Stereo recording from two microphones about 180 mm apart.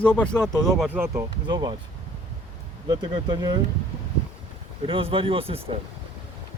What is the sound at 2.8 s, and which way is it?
Speech, 25° right (ahead or behind).